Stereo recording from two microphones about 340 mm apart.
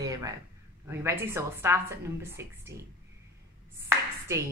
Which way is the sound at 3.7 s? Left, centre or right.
Centre.